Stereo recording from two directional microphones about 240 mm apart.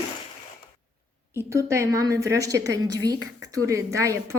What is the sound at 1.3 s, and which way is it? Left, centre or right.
Speech, centre.